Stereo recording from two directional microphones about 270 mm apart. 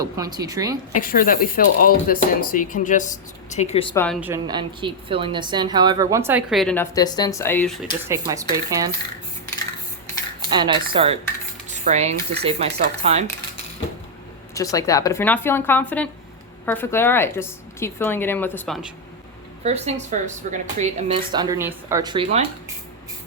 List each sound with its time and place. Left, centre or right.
0.0 s a woman's voice: centre
0.9 s speech: left
3.9 s speech: centre
4.2 s a woman's voice: centre
8.0 s a woman's voice: centre
10.5 s a woman's voice: centre
14.5 s a woman's voice: centre
19.6 s speech: right